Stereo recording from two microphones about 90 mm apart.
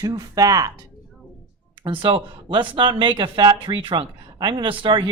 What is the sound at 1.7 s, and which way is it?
Speech, 70° right (ahead or behind).